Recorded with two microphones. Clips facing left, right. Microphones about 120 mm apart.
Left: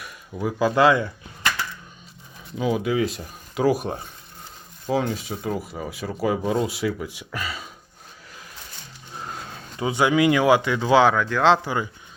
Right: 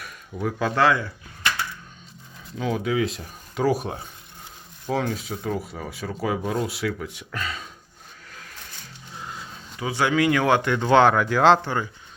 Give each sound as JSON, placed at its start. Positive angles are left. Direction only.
{"t": 0.0, "sound": "speech", "side_deg": 5}
{"t": 2.6, "sound": "speech", "side_deg": 10}
{"t": 5.1, "sound": "speech", "side_deg": 0}
{"t": 9.3, "sound": "a sound", "side_deg": 60}
{"t": 9.7, "sound": "speech", "side_deg": 20}
{"t": 11.6, "sound": "speech", "side_deg": 10}